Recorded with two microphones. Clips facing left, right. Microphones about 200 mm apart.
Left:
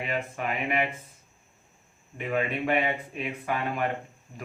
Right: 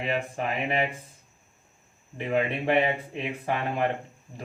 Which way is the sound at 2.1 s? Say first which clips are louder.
Right 2 dB; 25° right (ahead or behind).